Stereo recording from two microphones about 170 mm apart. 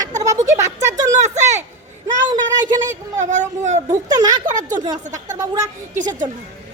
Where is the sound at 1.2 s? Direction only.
40° right (ahead or behind).